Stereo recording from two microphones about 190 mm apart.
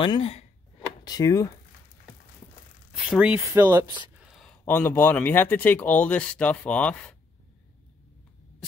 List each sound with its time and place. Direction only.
0.0 s a sound: 30° left (ahead or behind)
1.0 s speech: 20° left (ahead or behind)
2.9 s speech: 5° right (ahead or behind)
4.4 s speech: 5° left (ahead or behind)